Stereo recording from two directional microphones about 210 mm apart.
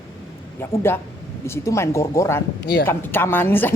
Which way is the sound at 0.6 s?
10° left (ahead or behind).